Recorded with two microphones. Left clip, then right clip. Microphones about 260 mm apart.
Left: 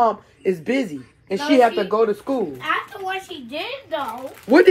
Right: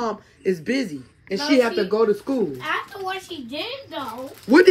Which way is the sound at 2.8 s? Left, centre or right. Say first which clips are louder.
Left 2 dB; right.